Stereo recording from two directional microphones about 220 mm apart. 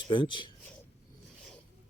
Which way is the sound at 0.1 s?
20° left (ahead or behind).